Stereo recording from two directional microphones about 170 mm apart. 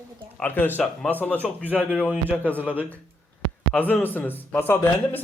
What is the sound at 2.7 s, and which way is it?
Speech, 10° right (ahead or behind).